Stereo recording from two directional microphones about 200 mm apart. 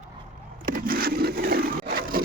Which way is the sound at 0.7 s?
45° right (ahead or behind).